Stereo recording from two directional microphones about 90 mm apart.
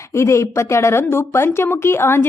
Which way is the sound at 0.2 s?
30° left (ahead or behind).